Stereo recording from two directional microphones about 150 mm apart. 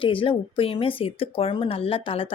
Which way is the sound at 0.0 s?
35° left (ahead or behind).